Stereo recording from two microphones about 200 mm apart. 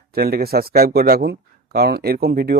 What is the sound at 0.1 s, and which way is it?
Speech, 50° right (ahead or behind).